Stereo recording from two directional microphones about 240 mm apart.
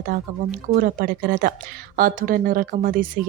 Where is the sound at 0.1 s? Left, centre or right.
Right.